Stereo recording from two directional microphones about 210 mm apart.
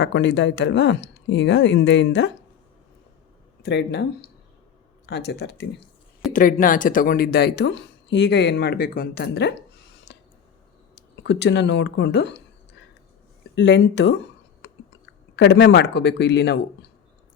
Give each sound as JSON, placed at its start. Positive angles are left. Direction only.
{"t": 0.0, "sound": "speech", "side_deg": 60}
{"t": 3.6, "sound": "speech", "side_deg": 55}
{"t": 6.3, "sound": "speech", "side_deg": 40}
{"t": 10.1, "sound": "a sound", "side_deg": 55}
{"t": 11.2, "sound": "speech", "side_deg": 55}
{"t": 13.6, "sound": "speech", "side_deg": 55}
{"t": 14.6, "sound": "chewing", "side_deg": 55}
{"t": 15.4, "sound": "speech", "side_deg": 55}